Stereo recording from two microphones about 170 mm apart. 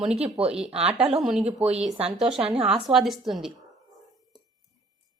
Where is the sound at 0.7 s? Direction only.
35° right (ahead or behind).